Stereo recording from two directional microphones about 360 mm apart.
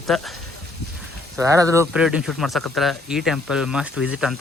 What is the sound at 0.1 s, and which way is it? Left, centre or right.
Speech, centre.